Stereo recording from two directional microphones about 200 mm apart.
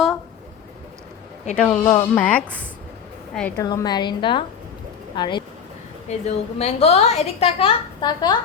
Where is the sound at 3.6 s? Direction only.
20° left (ahead or behind).